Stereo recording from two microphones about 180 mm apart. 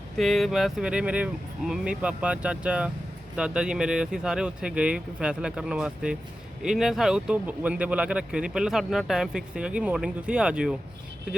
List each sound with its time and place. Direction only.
0.2 s speech: centre (ahead or behind)